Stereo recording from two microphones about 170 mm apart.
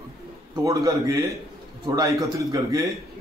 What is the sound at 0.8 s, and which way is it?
A man's voice, 20° right (ahead or behind).